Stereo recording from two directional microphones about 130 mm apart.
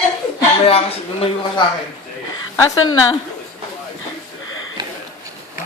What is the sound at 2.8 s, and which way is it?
Speech, 30° left (ahead or behind).